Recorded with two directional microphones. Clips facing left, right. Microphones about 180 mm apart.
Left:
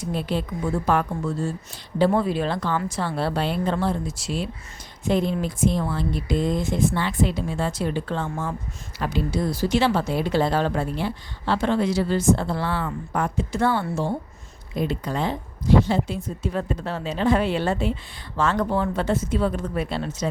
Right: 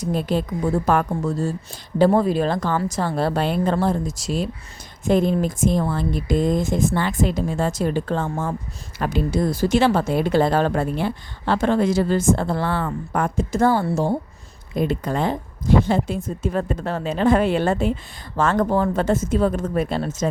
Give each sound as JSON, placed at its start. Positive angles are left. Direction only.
{"t": 0.0, "sound": "a woman's voice", "side_deg": -45}
{"t": 14.8, "sound": "a woman's voice", "side_deg": -50}